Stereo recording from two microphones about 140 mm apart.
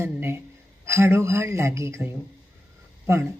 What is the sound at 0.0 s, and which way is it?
Speech, 15° right (ahead or behind).